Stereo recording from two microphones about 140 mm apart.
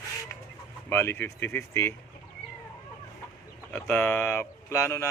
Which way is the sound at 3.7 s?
10° left (ahead or behind).